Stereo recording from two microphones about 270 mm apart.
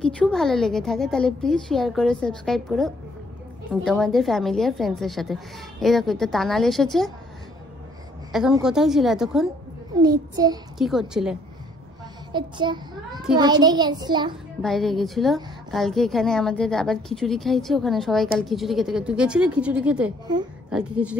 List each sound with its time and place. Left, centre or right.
0.0 s a woman's voice: centre
8.3 s a woman's voice: centre
10.0 s a child's voice: centre
10.8 s a woman's voice: centre
12.3 s a child's voice: centre
14.6 s a woman's voice: centre